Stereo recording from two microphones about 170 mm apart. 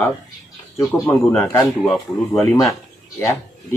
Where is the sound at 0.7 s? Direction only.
15° left (ahead or behind).